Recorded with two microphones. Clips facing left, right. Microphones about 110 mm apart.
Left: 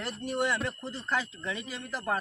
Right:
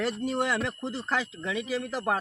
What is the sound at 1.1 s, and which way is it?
Speech, 90° right.